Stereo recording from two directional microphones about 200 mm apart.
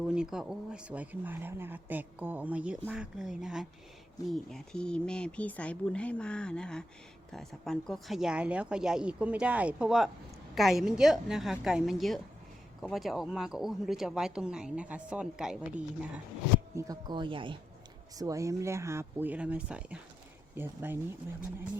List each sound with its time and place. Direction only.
0.0 s speech: 5° right (ahead or behind)
16.7 s speech: 15° right (ahead or behind)